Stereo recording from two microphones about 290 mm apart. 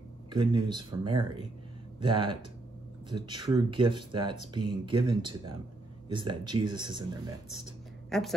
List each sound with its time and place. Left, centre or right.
0.3 s speech: centre
8.1 s speech: centre